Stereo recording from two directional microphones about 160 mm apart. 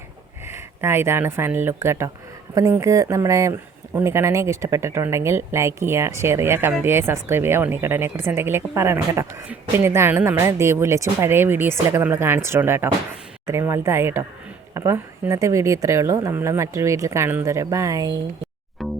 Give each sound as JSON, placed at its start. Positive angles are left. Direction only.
{"t": 0.4, "sound": "speech", "side_deg": -15}
{"t": 18.8, "sound": "music", "side_deg": 0}